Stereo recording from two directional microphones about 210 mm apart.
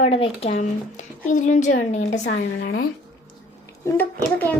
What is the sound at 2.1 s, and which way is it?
Speech, 55° left (ahead or behind).